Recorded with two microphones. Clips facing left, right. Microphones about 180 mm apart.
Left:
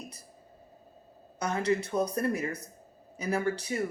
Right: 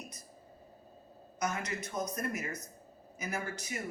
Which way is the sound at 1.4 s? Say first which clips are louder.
Left 8 dB; 30° left (ahead or behind).